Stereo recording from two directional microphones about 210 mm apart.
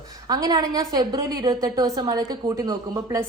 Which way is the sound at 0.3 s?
15° right (ahead or behind).